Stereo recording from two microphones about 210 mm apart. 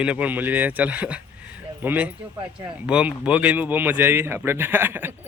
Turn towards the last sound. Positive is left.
turn(degrees=-10)  # may be behind; listen again after turning